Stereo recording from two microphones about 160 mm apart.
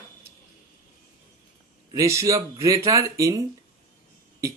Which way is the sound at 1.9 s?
20° right (ahead or behind).